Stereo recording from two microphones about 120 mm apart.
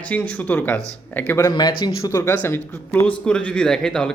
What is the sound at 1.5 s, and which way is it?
Speech, 40° left (ahead or behind).